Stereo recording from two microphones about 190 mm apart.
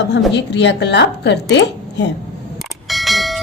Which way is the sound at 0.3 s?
65° left (ahead or behind).